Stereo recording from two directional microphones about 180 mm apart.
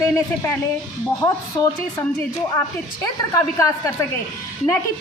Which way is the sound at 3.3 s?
15° left (ahead or behind).